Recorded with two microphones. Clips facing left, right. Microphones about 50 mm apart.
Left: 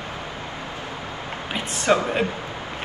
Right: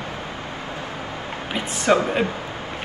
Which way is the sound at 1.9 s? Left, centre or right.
Right.